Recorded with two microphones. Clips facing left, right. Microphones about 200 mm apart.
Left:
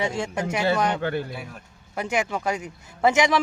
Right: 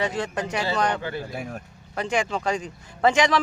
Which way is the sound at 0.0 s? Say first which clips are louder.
Even; 10° left (ahead or behind).